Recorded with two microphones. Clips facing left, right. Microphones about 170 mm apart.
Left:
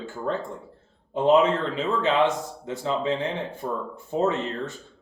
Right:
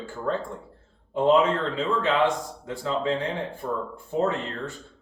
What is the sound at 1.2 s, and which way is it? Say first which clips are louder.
Speech: left 1 dB; 20° left (ahead or behind).